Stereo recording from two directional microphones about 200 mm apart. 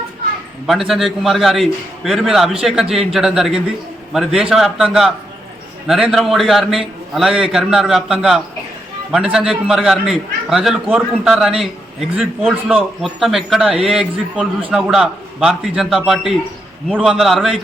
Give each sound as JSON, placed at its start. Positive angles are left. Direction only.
{"t": 0.7, "sound": "a man's voice", "side_deg": 0}